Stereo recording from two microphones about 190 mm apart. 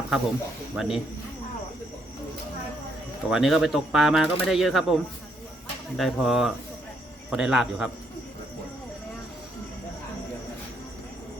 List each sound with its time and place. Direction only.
0.8 s speech: centre (ahead or behind)
3.2 s speech: centre (ahead or behind)
6.0 s speech: centre (ahead or behind)